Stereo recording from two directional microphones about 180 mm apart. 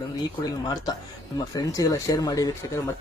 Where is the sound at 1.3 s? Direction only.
20° left (ahead or behind).